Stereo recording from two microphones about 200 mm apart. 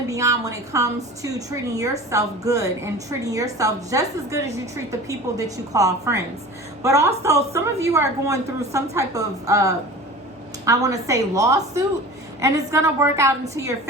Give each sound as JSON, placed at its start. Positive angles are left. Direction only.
{"t": 0.1, "sound": "a woman's voice", "side_deg": -15}